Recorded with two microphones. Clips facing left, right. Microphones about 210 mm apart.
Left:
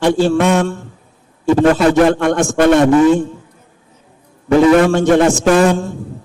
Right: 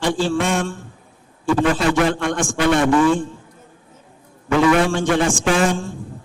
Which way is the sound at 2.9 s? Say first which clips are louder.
Left 6 dB; 20° left (ahead or behind).